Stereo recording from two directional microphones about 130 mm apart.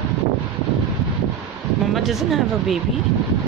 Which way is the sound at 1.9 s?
Centre (ahead or behind).